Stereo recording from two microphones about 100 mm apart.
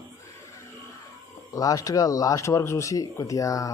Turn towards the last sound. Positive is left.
turn(degrees=35)  # may be behind; listen again after turning